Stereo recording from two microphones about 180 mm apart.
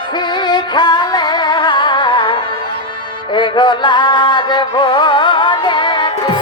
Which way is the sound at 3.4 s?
25° left (ahead or behind).